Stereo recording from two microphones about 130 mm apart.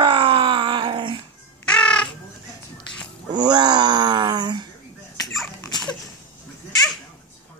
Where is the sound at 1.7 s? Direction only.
5° left (ahead or behind).